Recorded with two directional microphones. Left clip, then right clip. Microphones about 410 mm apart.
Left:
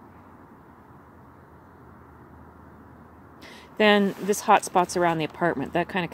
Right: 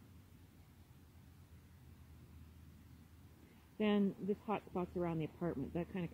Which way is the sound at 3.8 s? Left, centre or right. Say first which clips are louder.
Left 18 dB; left.